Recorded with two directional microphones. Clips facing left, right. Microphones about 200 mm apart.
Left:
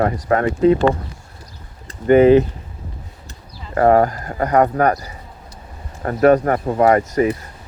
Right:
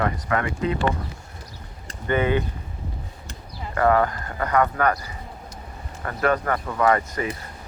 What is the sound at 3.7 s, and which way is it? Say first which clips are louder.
Speech: left 6 dB; 40° left (ahead or behind).